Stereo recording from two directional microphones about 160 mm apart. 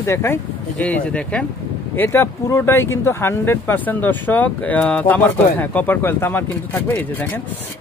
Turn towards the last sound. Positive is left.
turn(degrees=10)  # may be behind; listen again after turning